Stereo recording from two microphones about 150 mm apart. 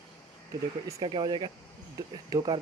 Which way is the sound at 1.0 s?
35° right (ahead or behind).